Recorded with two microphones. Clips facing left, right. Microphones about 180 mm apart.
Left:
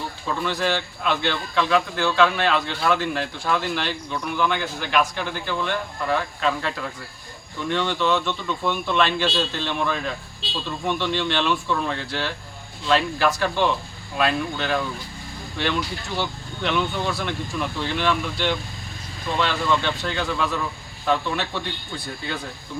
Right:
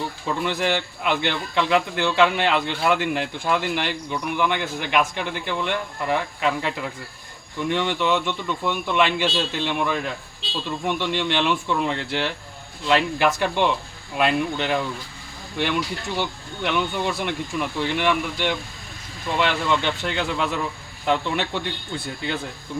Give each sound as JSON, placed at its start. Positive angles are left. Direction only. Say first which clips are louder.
{"t": 0.3, "sound": "speech", "louder": "even", "side_deg": -20}
{"t": 16.1, "sound": "speech", "louder": "left 1 dB", "side_deg": -15}